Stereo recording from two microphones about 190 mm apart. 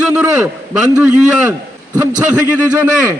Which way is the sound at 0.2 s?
5° right (ahead or behind).